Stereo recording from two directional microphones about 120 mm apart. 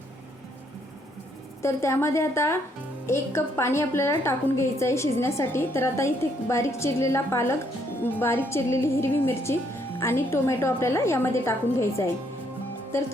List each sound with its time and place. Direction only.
1.6 s a woman's voice: 20° left (ahead or behind)